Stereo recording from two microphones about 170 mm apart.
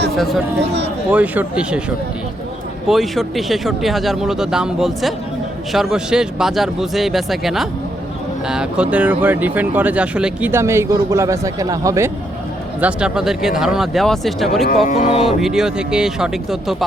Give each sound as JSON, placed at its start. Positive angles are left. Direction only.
{"t": 0.2, "sound": "speech", "side_deg": 0}
{"t": 0.6, "sound": "speech", "side_deg": -90}
{"t": 1.1, "sound": "speech", "side_deg": -10}
{"t": 2.8, "sound": "speech", "side_deg": 0}
{"t": 12.8, "sound": "speech", "side_deg": -5}
{"t": 14.8, "sound": "music", "side_deg": 40}
{"t": 15.4, "sound": "speech", "side_deg": 0}